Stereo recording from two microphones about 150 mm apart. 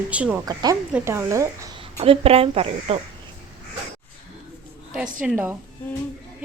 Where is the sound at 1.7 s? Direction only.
40° right (ahead or behind).